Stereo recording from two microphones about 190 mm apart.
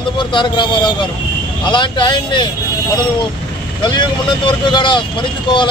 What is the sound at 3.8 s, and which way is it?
Speech, 25° left (ahead or behind).